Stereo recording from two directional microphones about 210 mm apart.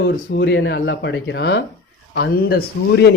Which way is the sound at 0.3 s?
55° left (ahead or behind).